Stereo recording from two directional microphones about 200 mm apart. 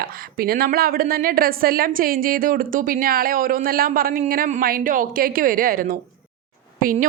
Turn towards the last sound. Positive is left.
turn(degrees=-45)  # may be behind; listen again after turning